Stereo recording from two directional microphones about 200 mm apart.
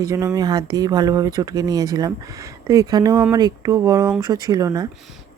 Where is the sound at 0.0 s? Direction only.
15° right (ahead or behind).